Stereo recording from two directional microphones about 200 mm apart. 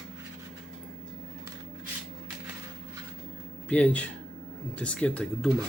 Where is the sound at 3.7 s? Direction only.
5° left (ahead or behind).